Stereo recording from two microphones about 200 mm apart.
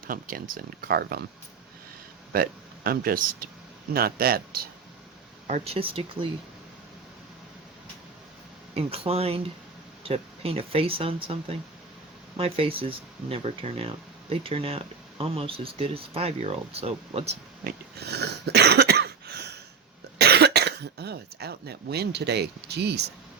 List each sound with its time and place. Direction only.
0.1 s speech: 45° right (ahead or behind)
2.3 s speech: 50° right (ahead or behind)
5.5 s speech: 35° right (ahead or behind)
8.7 s speech: 30° right (ahead or behind)
18.0 s cough: 55° right (ahead or behind)